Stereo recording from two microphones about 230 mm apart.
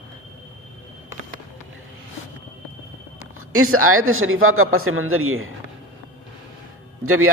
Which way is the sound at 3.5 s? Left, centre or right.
Right.